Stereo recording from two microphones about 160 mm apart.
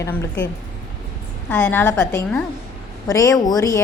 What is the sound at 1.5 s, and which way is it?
A woman's voice, 15° left (ahead or behind).